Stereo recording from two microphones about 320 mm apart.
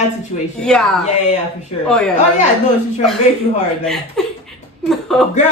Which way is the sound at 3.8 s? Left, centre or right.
Centre.